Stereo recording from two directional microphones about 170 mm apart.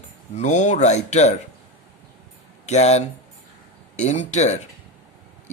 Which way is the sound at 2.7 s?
40° left (ahead or behind).